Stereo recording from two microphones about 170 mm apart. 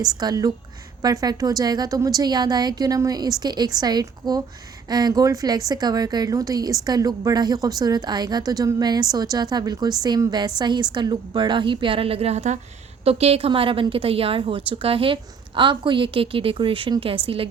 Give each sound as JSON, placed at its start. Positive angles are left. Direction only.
{"t": 0.0, "sound": "a woman's voice", "side_deg": -25}